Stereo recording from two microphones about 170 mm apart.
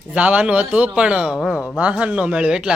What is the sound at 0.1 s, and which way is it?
A man's voice, 5° right (ahead or behind).